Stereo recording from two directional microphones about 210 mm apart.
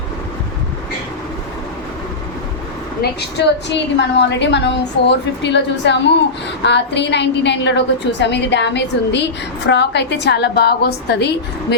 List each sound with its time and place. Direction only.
3.0 s a woman's voice: 50° left (ahead or behind)